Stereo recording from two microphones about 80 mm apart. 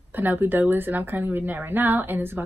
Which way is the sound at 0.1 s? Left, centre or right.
Right.